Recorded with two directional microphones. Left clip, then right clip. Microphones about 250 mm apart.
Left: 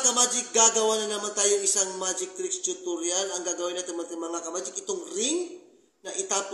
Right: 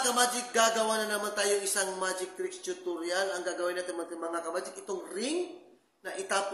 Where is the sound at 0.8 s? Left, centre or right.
Centre.